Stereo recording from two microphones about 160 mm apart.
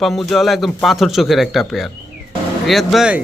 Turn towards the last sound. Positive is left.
turn(degrees=-5)  # may be behind; listen again after turning